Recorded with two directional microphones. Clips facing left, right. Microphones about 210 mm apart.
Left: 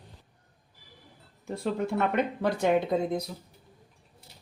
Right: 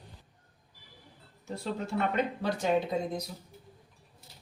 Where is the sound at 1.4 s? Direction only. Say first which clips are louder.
Left 5 dB; 55° left (ahead or behind).